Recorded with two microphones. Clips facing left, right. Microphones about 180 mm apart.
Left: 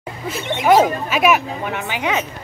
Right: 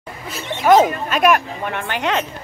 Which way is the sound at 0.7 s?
10° left (ahead or behind).